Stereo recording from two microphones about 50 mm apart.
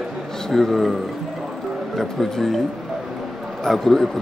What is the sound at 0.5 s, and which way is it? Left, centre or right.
Speech, centre.